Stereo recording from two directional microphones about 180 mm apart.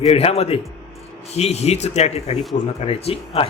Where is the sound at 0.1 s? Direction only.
35° left (ahead or behind).